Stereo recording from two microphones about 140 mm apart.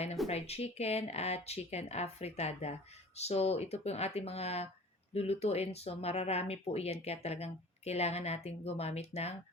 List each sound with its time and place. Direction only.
0.3 s speech: 50° left (ahead or behind)